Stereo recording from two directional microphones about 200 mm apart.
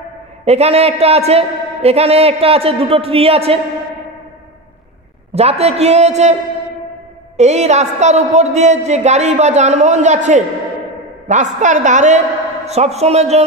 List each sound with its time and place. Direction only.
0.5 s a man's voice: 30° right (ahead or behind)
5.3 s a man's voice: 30° right (ahead or behind)
7.3 s a man's voice: 35° right (ahead or behind)